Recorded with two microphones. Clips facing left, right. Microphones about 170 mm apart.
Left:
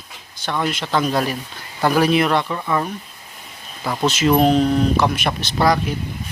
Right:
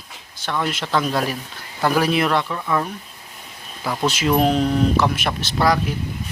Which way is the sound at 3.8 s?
5° right (ahead or behind).